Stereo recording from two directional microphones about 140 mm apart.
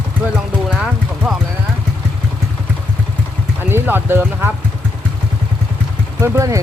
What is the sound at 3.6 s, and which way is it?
Speech, 15° right (ahead or behind).